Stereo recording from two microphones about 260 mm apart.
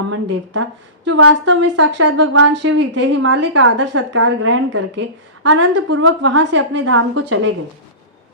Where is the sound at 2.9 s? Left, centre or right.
Right.